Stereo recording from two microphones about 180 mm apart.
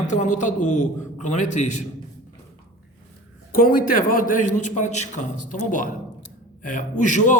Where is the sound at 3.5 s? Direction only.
50° left (ahead or behind).